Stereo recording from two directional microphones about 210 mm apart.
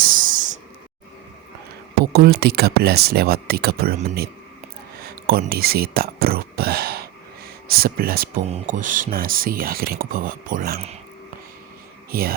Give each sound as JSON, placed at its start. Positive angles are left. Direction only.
{"t": 0.0, "sound": "a sound", "side_deg": -40}
{"t": 2.1, "sound": "speech", "side_deg": -50}
{"t": 8.4, "sound": "speech", "side_deg": -35}